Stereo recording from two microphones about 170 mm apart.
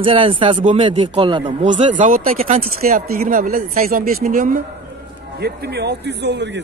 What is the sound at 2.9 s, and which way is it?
Speech, 55° right (ahead or behind).